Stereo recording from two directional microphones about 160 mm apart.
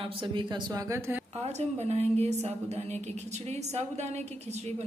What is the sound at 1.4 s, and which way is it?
A woman's voice, 40° right (ahead or behind).